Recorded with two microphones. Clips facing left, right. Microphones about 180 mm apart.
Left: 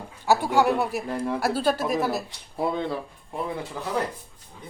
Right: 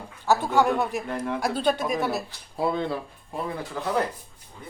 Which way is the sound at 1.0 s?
35° left (ahead or behind).